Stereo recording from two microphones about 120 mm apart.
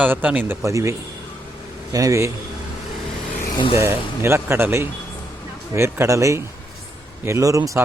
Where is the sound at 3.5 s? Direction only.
45° left (ahead or behind).